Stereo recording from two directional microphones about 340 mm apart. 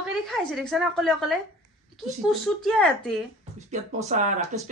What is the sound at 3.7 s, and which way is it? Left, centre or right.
Speech, centre.